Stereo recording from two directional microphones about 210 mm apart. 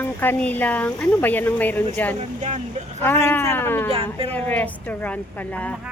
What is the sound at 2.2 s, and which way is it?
Speech, 35° right (ahead or behind).